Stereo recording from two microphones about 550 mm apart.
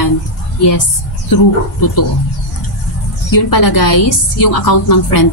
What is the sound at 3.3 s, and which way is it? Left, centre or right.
A woman's voice, left.